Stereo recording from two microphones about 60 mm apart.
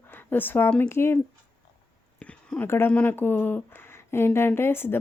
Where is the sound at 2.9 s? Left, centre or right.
Left.